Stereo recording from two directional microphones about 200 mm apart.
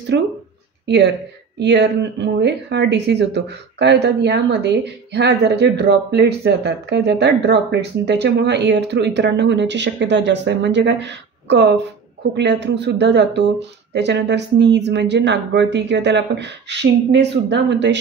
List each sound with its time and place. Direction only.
0.1 s speech: 60° right (ahead or behind)